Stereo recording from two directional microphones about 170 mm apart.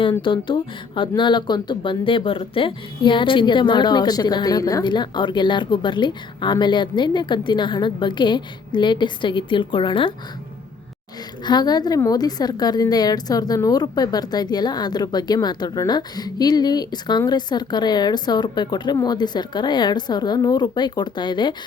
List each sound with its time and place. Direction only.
0.0 s speech: 30° left (ahead or behind)
11.4 s speech: 25° left (ahead or behind)